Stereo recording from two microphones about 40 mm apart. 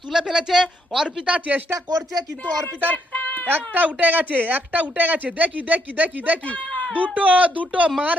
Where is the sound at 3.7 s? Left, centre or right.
Right.